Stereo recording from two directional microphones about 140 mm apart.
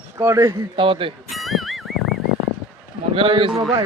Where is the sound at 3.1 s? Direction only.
40° right (ahead or behind).